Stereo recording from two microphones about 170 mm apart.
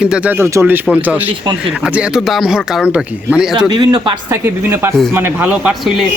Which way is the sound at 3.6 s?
25° right (ahead or behind).